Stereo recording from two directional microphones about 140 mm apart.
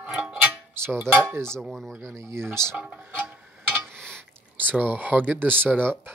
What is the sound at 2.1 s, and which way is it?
Speech, 20° right (ahead or behind).